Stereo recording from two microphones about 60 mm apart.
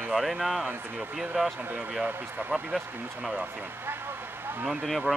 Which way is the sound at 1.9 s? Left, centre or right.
Centre.